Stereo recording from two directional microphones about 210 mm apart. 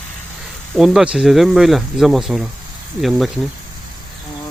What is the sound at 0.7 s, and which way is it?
Speech, centre (ahead or behind).